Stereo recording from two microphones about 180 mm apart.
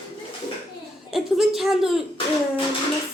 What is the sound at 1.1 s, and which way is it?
Speech, centre (ahead or behind).